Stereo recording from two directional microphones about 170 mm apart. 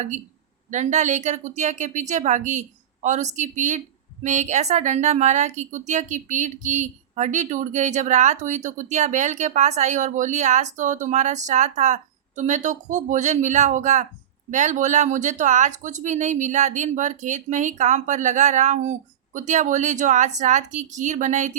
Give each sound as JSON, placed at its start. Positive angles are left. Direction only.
{"t": 0.7, "sound": "a woman's voice", "side_deg": -45}